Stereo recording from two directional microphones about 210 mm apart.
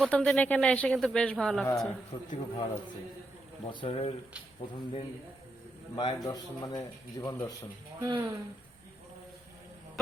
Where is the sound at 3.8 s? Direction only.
25° left (ahead or behind).